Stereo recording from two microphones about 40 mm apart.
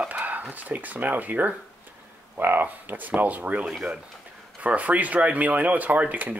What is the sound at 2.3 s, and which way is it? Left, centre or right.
Speech, right.